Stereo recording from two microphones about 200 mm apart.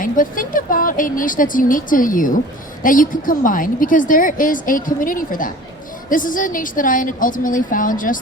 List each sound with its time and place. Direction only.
0.0 s a woman's voice: 45° left (ahead or behind)